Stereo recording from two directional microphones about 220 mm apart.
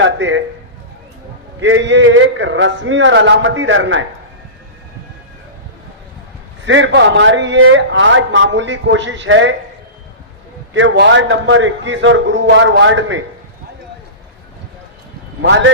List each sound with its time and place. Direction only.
0.0 s a man's voice: 55° right (ahead or behind)
1.6 s a man's voice: 55° right (ahead or behind)
6.7 s a man's voice: 55° right (ahead or behind)
10.8 s a man's voice: 55° right (ahead or behind)
15.4 s a man's voice: 55° right (ahead or behind)